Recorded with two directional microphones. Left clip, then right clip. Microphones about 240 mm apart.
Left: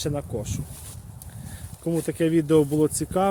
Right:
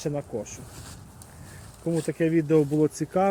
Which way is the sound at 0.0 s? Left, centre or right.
Centre.